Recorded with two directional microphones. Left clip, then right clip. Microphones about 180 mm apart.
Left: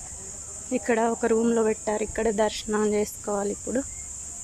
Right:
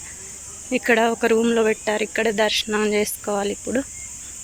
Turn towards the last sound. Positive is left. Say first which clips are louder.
# right 4 dB
turn(degrees=0)  # may be behind; listen again after turning